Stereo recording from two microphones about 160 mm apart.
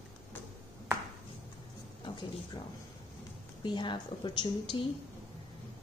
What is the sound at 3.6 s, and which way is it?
Speech, 30° left (ahead or behind).